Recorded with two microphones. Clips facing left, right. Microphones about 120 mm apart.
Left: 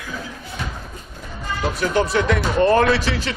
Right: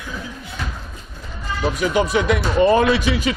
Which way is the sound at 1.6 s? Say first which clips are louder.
Right 1 dB; 10° right (ahead or behind).